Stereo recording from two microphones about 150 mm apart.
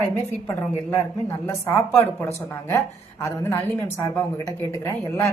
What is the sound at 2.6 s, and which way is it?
A woman's voice, 15° left (ahead or behind).